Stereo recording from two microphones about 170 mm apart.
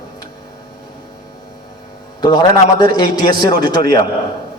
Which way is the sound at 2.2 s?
25° left (ahead or behind).